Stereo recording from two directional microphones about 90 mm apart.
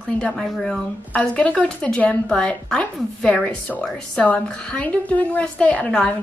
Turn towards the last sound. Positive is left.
turn(degrees=10)  # may be behind; listen again after turning